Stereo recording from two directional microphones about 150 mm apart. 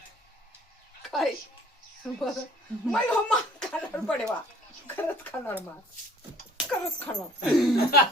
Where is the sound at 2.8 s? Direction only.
5° left (ahead or behind).